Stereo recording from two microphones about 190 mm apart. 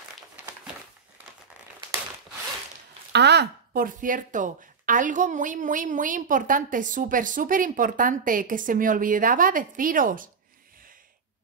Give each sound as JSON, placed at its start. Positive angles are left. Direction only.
{"t": 3.1, "sound": "speech", "side_deg": -65}